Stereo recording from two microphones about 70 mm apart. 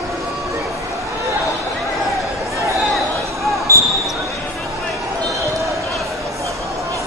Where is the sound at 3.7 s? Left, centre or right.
Right.